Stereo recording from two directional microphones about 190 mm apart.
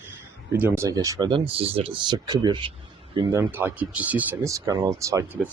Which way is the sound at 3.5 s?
10° right (ahead or behind).